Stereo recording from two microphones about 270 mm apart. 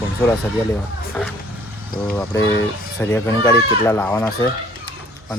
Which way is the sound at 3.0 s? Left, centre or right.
Centre.